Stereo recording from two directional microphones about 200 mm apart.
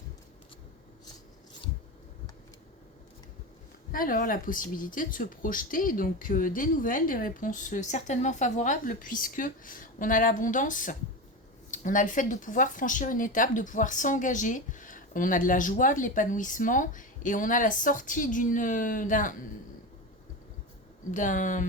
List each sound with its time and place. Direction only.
3.9 s speech: 45° left (ahead or behind)
21.1 s speech: 40° left (ahead or behind)